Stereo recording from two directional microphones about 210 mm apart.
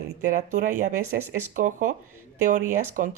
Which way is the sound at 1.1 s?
55° right (ahead or behind).